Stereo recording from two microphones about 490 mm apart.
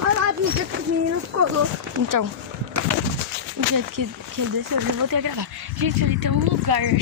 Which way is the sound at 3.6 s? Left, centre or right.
Right.